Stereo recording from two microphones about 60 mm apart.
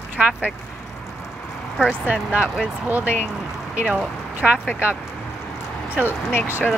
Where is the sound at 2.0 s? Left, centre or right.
Right.